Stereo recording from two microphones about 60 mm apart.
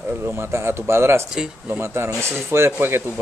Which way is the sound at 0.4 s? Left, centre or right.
Right.